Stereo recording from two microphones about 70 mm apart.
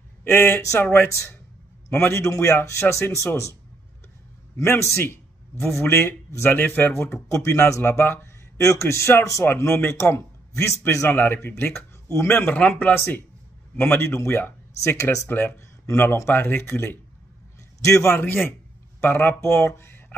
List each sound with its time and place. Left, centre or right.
0.2 s speech: left
0.9 s speech: left
4.6 s speech: left
4.9 s a sound: left
5.8 s speech: left
7.0 s speech: left
7.9 s speech: left
8.5 s speech: left
11.1 s speech: left
12.5 s speech: left
15.0 s speech: left
15.2 s speech: left
17.7 s speech: left